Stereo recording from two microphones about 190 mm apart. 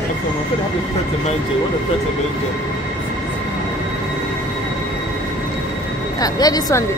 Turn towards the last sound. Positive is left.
turn(degrees=15)  # may be behind; listen again after turning